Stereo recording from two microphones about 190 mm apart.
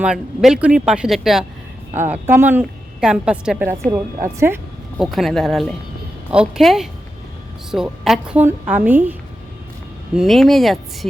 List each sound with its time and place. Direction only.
0.0 s a woman's voice: 5° right (ahead or behind)
4.9 s a woman's voice: centre (ahead or behind)
10.2 s speech: centre (ahead or behind)